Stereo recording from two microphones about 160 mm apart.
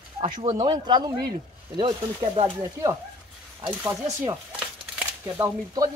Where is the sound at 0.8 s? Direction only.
30° right (ahead or behind).